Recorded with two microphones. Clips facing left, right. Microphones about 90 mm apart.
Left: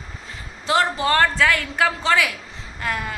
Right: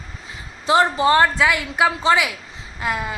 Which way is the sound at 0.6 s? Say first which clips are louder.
Right 4 dB; 20° right (ahead or behind).